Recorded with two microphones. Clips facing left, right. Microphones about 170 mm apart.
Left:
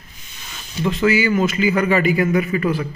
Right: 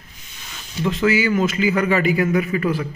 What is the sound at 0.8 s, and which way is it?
A man's voice, 15° left (ahead or behind).